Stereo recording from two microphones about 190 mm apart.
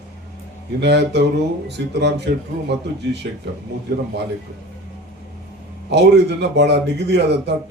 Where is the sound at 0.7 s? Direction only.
65° right (ahead or behind).